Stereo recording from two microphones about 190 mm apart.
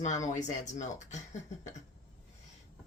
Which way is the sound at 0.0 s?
40° left (ahead or behind).